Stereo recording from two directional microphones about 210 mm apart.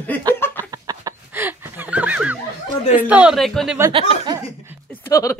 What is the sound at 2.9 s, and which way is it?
Speech, 5° right (ahead or behind).